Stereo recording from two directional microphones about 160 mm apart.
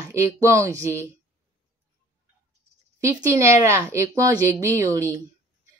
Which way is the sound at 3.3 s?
15° right (ahead or behind).